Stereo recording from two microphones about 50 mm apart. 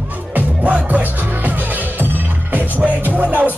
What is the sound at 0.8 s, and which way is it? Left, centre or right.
Music, right.